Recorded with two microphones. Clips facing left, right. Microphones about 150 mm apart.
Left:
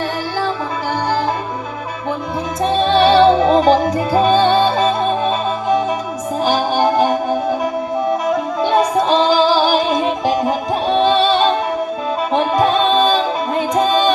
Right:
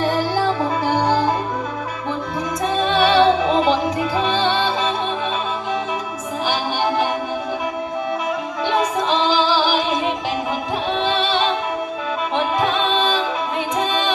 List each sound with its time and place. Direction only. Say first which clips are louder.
2.7 s music: left 4 dB; 35° left (ahead or behind)
8.6 s music: left 4 dB; 40° left (ahead or behind)